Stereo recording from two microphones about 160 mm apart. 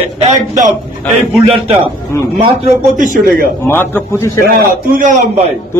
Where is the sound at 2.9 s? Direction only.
55° right (ahead or behind).